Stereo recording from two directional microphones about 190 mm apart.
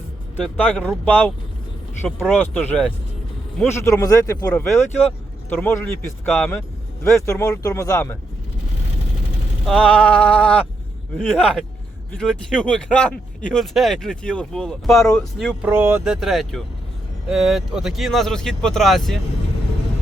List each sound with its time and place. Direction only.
0.4 s speech: 5° left (ahead or behind)
3.8 s speech: 15° left (ahead or behind)
9.6 s speech: 5° left (ahead or behind)
15.7 s speech: 10° right (ahead or behind)
16.2 s speech: centre (ahead or behind)